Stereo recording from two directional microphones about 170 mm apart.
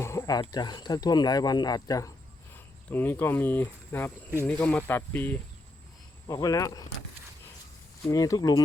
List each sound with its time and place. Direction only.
0.0 s a sound: 15° left (ahead or behind)
0.5 s speech: 25° left (ahead or behind)
8.0 s speech: 20° left (ahead or behind)